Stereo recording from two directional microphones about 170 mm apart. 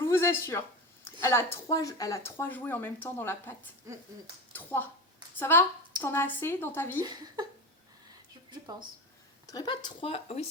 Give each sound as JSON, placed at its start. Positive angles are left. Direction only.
{"t": 0.0, "sound": "a sound", "side_deg": 15}
{"t": 1.2, "sound": "speech", "side_deg": 15}
{"t": 4.5, "sound": "speech", "side_deg": 10}
{"t": 7.0, "sound": "speech", "side_deg": -25}
{"t": 9.5, "sound": "speech", "side_deg": 25}